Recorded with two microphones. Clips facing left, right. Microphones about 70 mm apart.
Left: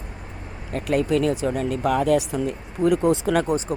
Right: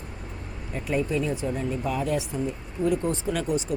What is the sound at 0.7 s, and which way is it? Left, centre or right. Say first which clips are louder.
Speech: left 5 dB; left.